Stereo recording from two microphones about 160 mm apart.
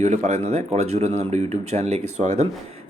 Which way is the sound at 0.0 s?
45° right (ahead or behind).